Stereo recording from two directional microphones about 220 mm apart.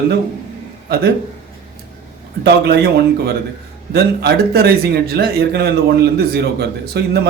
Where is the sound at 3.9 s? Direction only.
45° right (ahead or behind).